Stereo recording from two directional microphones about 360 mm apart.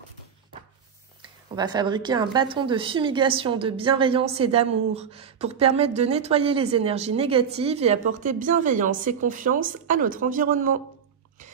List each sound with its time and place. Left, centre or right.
1.5 s a woman's voice: centre